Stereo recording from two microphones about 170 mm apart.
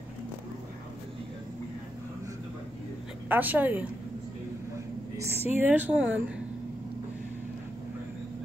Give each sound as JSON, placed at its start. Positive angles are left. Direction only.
{"t": 3.3, "sound": "a woman's voice", "side_deg": -10}
{"t": 5.1, "sound": "a sound", "side_deg": -15}
{"t": 5.6, "sound": "a woman's voice", "side_deg": -10}